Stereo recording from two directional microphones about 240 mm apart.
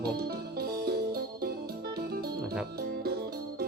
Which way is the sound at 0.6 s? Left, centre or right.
Right.